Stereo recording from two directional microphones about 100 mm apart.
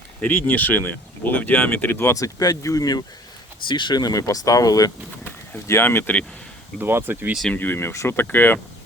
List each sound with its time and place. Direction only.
0.2 s speech: 20° left (ahead or behind); by 3.0 s 40° left (ahead or behind)
3.7 s speech: 50° left (ahead or behind)
5.2 s speech: 25° left (ahead or behind)
6.7 s speech: 20° right (ahead or behind)
7.5 s speech: 20° left (ahead or behind)